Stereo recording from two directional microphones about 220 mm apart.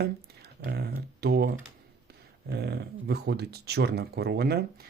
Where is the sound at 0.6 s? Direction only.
45° right (ahead or behind).